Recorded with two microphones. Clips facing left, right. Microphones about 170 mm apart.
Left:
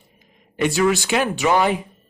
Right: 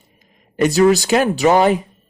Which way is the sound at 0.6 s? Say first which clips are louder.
Right 6 dB; 40° right (ahead or behind).